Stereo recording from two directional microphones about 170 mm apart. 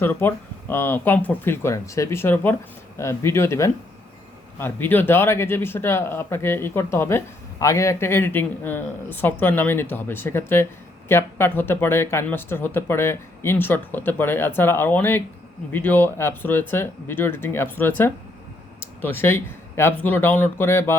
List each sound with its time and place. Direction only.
0.0 s speech: 10° left (ahead or behind)